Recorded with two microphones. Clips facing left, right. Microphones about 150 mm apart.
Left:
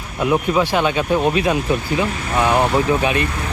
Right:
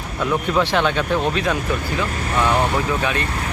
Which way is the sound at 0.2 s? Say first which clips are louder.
Left 3 dB; 10° left (ahead or behind).